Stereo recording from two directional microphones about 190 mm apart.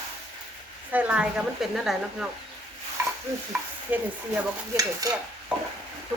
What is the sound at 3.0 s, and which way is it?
Stir, 15° right (ahead or behind).